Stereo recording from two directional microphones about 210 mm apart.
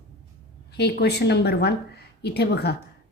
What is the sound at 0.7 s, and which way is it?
A woman's voice, 50° left (ahead or behind).